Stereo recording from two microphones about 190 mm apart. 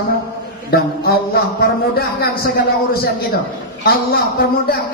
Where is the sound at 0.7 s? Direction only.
55° left (ahead or behind).